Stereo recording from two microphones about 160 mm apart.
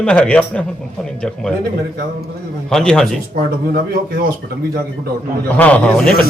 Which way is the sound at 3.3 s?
75° right (ahead or behind).